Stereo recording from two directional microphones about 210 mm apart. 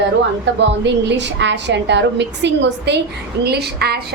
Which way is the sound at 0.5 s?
55° right (ahead or behind).